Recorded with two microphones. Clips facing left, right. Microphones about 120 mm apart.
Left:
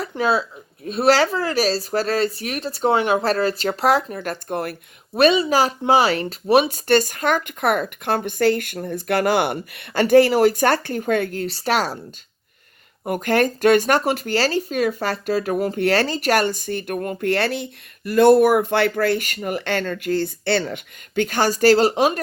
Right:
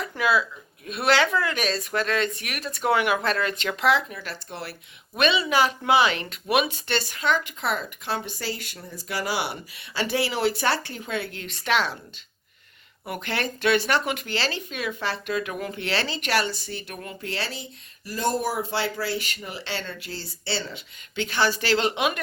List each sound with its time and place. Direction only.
0.0 s speech: 35° left (ahead or behind)
13.1 s speech: 45° left (ahead or behind)